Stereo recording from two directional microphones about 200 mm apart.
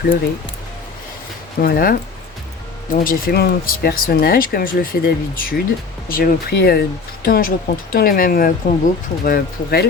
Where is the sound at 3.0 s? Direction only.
45° left (ahead or behind).